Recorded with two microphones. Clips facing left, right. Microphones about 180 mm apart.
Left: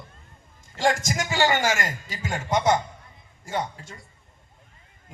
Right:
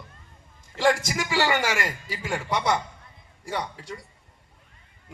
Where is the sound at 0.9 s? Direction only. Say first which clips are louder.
Right 1 dB; 45° left (ahead or behind).